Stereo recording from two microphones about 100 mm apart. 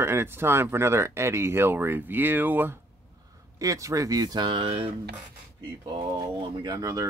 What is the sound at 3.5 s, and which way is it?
Speech, 35° right (ahead or behind).